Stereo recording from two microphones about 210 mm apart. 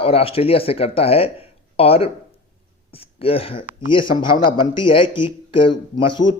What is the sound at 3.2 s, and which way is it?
Speech, 25° left (ahead or behind).